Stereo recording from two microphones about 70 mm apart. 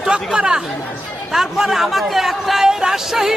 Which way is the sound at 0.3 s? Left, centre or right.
Centre.